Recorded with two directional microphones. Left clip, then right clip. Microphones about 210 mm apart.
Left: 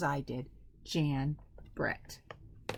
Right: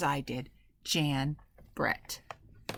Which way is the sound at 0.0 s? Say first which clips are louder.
Right 3 dB; 25° right (ahead or behind).